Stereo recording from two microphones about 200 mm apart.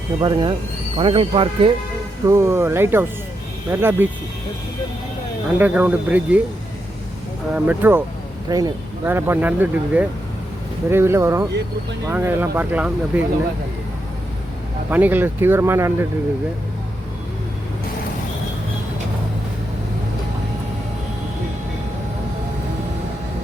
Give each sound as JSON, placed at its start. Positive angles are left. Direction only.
{"t": 0.2, "sound": "speech", "side_deg": -20}
{"t": 2.2, "sound": "speech", "side_deg": -15}
{"t": 5.5, "sound": "speech", "side_deg": -10}
{"t": 7.5, "sound": "speech", "side_deg": -10}
{"t": 14.8, "sound": "speech", "side_deg": -10}